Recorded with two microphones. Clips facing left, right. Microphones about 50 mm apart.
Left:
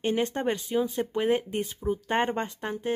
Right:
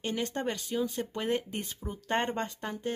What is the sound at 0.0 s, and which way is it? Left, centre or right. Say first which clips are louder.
Speech: left 6 dB; left.